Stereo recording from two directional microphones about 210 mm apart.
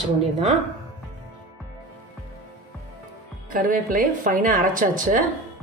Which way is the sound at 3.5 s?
40° right (ahead or behind).